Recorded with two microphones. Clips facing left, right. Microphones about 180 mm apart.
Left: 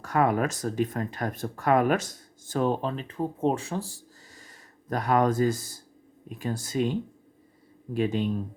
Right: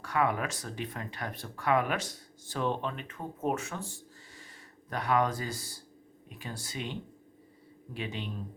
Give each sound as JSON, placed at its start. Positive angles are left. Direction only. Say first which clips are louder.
{"t": 0.0, "sound": "speech", "louder": "left 6 dB", "side_deg": 45}
{"t": 7.9, "sound": "speech", "louder": "left 12 dB", "side_deg": 45}